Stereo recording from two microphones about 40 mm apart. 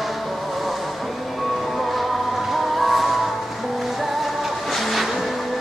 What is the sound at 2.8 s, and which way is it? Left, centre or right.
Music, centre.